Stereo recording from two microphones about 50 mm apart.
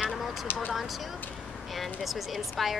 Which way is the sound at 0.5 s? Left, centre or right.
Left.